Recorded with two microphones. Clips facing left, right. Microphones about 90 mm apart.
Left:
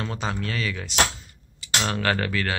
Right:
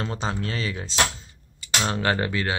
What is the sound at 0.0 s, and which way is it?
Speech, 30° right (ahead or behind).